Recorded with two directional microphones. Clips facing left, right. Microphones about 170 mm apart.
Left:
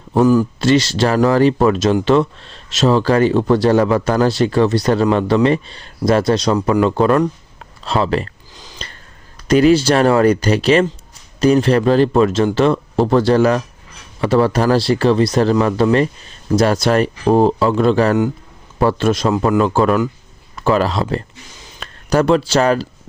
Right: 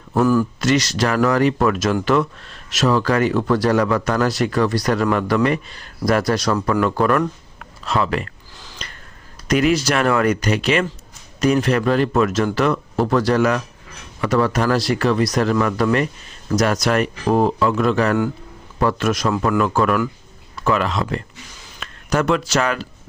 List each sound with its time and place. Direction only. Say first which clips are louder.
0.1 s speech: left 4 dB; 20° left (ahead or behind)
0.6 s speech: left 4 dB; 30° left (ahead or behind)
8.5 s a sound: left 2 dB; 15° left (ahead or behind)
9.5 s speech: left 6 dB; 30° left (ahead or behind)